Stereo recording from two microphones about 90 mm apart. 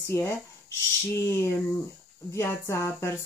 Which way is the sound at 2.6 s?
35° left (ahead or behind).